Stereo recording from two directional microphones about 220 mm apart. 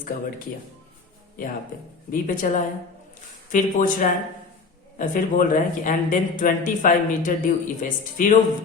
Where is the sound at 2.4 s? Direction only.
40° left (ahead or behind).